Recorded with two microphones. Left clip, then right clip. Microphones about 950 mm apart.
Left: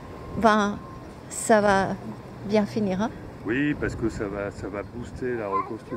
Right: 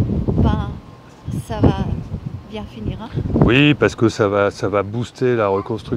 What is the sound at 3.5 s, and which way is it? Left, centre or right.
Speech, right.